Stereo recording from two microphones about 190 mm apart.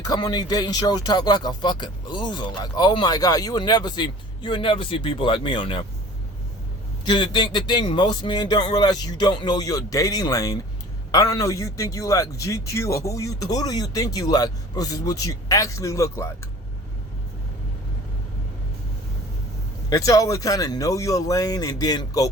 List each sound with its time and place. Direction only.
0.0 s speech: 20° left (ahead or behind)
7.0 s a man's voice: 25° left (ahead or behind)
19.9 s a man's voice: 15° left (ahead or behind)